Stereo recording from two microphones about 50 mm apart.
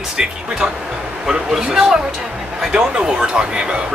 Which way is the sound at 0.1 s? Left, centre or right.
Centre.